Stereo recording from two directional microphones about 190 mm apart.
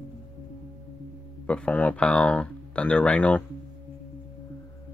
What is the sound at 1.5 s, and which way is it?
Speech, 5° left (ahead or behind).